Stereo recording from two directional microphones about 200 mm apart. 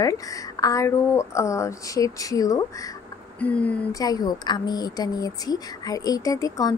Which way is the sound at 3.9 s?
20° left (ahead or behind).